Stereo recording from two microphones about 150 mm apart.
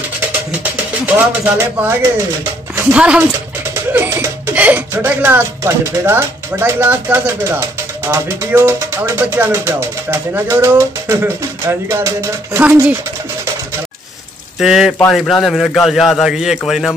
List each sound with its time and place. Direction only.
1.0 s speech: 10° right (ahead or behind)
14.6 s speech: centre (ahead or behind)